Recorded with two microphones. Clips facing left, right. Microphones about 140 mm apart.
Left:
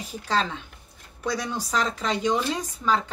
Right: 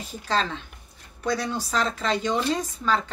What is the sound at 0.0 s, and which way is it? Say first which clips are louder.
Speech: even; 10° left (ahead or behind).